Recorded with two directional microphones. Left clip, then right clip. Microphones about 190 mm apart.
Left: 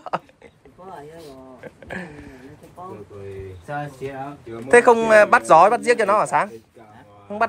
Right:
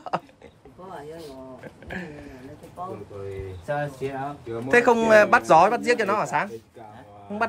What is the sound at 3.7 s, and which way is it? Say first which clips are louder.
Speech: right 2 dB; centre (ahead or behind).